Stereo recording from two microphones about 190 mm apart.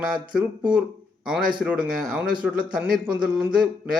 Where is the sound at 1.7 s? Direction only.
50° right (ahead or behind).